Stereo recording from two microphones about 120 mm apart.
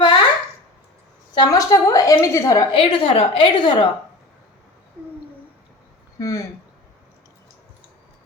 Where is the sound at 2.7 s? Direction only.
45° left (ahead or behind).